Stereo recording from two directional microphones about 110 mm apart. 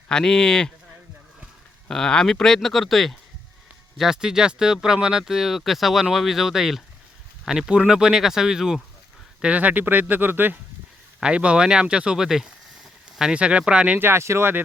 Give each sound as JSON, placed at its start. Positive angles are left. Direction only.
{"t": 0.1, "sound": "speech", "side_deg": 5}
{"t": 1.9, "sound": "speech", "side_deg": 5}
{"t": 14.1, "sound": "speech", "side_deg": -25}